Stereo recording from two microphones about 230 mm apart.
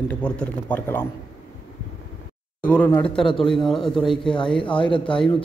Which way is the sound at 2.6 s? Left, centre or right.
Centre.